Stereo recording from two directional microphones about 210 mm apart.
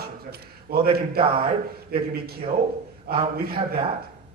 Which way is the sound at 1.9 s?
45° right (ahead or behind).